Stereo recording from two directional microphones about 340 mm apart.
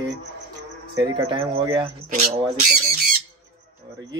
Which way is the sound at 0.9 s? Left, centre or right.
Centre.